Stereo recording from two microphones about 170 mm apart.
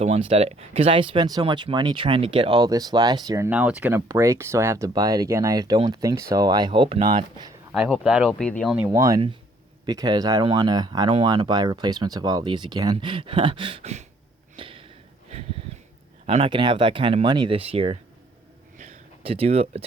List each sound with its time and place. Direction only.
0.0 s speech: 35° right (ahead or behind)
7.7 s speech: centre (ahead or behind)
8.9 s speech: 20° right (ahead or behind); by 14.0 s 35° right (ahead or behind)
14.5 s a sound: 30° right (ahead or behind)
16.2 s speech: 35° right (ahead or behind)
18.8 s a sound: 35° right (ahead or behind)